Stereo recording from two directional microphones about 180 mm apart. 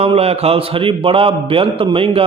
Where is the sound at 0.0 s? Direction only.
35° right (ahead or behind).